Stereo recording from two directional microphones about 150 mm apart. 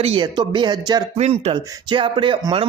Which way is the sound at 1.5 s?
30° right (ahead or behind).